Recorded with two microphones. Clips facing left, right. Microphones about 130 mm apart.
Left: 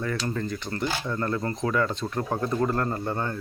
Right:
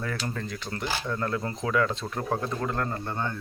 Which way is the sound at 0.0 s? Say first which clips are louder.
Left 4 dB; centre (ahead or behind).